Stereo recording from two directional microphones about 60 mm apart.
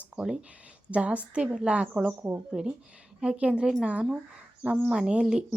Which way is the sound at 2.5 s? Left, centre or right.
Centre.